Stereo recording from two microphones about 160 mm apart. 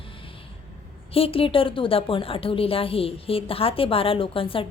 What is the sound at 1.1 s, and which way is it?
A woman's voice, 35° left (ahead or behind).